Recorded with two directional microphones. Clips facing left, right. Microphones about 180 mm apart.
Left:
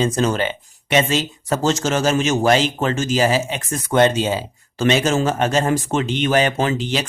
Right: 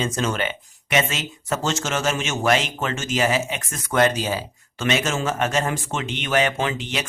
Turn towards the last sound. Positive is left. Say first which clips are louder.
# left 5 dB
turn(degrees=35)  # may be behind; listen again after turning